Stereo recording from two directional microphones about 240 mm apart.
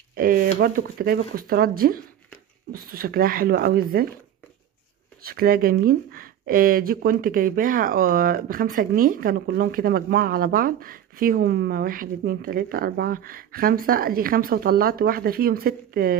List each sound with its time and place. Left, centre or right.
0.1 s speech: right
5.2 s speech: right